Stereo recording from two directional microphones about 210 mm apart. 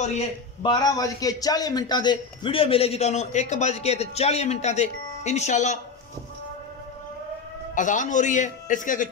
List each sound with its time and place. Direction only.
0.0 s a man's voice: 30° left (ahead or behind)
7.7 s a man's voice: 35° left (ahead or behind)